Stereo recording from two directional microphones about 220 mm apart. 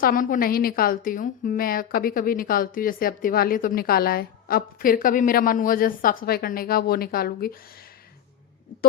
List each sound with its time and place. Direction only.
0.0 s a woman's voice: 40° left (ahead or behind)